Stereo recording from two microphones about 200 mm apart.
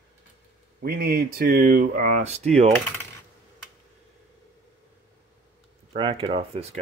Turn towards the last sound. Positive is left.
turn(degrees=-30)  # may be behind; listen again after turning